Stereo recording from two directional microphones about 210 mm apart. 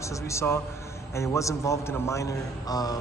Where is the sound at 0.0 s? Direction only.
15° left (ahead or behind).